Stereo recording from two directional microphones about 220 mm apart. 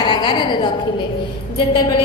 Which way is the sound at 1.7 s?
20° left (ahead or behind).